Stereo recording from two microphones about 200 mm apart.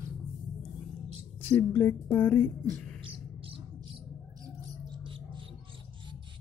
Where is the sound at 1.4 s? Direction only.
10° left (ahead or behind).